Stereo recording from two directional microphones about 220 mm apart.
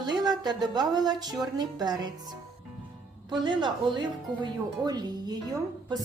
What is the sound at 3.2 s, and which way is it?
A woman's voice, 20° right (ahead or behind).